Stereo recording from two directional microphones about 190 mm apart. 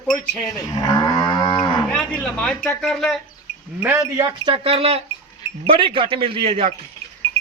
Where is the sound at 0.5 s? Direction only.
20° left (ahead or behind).